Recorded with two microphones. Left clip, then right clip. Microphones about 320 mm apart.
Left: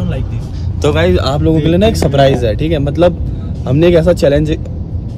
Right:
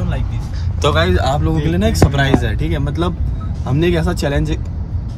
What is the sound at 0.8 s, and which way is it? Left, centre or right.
Speech, centre.